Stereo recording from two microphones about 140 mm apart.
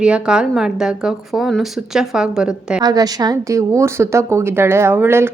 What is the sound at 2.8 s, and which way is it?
A woman's voice, 30° right (ahead or behind).